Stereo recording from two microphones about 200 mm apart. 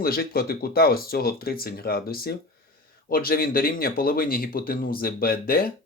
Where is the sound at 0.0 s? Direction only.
50° left (ahead or behind).